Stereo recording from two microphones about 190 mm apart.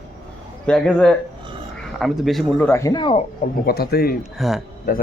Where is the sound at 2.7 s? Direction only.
15° left (ahead or behind).